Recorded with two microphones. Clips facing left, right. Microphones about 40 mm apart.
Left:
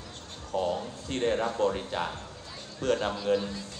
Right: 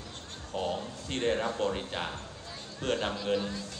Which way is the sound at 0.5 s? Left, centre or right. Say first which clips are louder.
Left 4 dB; right.